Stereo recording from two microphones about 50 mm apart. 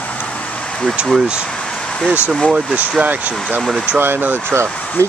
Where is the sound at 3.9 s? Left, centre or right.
Right.